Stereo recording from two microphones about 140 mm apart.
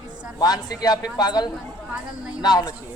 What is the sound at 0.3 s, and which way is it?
Speech, 30° left (ahead or behind).